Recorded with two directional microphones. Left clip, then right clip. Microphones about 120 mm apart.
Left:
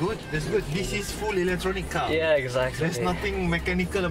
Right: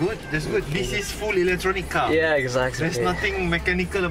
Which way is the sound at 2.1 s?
25° right (ahead or behind).